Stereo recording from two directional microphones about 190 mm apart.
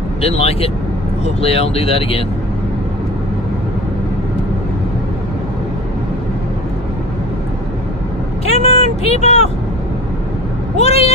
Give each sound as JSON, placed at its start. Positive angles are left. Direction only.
{"t": 0.2, "sound": "speech", "side_deg": 30}
{"t": 8.5, "sound": "vehicle", "side_deg": 35}
{"t": 10.8, "sound": "speech", "side_deg": 35}